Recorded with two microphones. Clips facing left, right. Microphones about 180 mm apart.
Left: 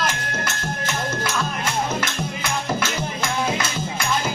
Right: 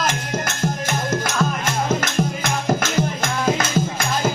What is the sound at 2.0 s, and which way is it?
Music, 50° right (ahead or behind).